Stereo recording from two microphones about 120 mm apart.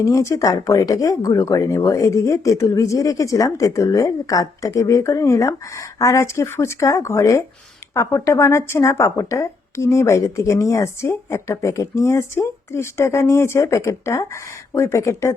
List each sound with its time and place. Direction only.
0.0 s speech: 25° left (ahead or behind)